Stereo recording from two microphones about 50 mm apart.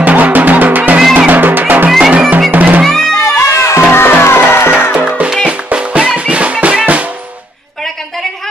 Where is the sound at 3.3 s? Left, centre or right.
Left.